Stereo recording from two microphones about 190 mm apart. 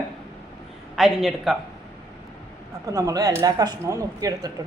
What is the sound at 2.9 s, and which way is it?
Speech, 15° right (ahead or behind).